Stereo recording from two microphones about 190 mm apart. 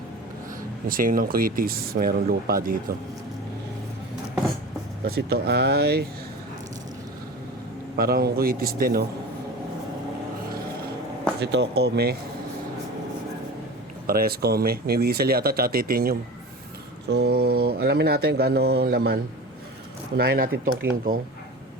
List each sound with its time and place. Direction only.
0.9 s speech: 45° right (ahead or behind)
5.0 s speech: 55° right (ahead or behind)
7.9 s speech: 55° right (ahead or behind)
11.3 s speech: 60° right (ahead or behind)
14.1 s speech: 50° right (ahead or behind)